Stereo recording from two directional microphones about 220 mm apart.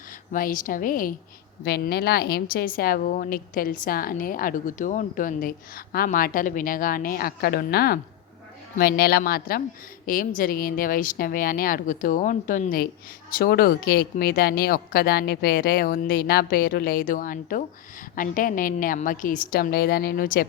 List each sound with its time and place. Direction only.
0.3 s a woman's voice: 40° left (ahead or behind)